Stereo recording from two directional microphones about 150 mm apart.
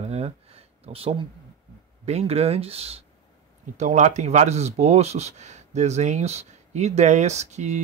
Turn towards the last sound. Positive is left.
turn(degrees=-50)  # may be behind; listen again after turning